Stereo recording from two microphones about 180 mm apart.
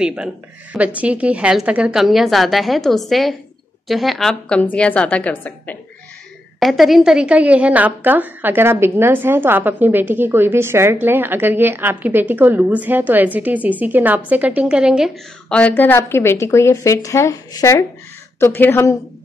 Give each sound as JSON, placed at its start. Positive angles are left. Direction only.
{"t": 0.0, "sound": "a woman's voice", "side_deg": -5}
{"t": 15.5, "sound": "speech", "side_deg": 10}